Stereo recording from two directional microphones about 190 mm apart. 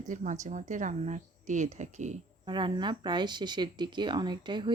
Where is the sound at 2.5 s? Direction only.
25° right (ahead or behind).